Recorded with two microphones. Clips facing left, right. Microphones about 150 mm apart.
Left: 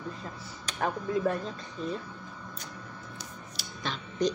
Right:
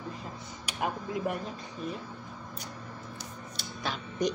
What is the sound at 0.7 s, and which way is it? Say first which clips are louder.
Speech: left 2 dB; 10° right (ahead or behind).